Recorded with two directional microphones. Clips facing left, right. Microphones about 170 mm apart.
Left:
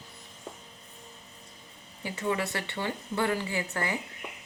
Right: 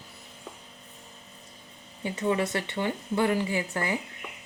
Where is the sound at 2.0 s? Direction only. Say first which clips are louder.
Right 4 dB; 20° right (ahead or behind).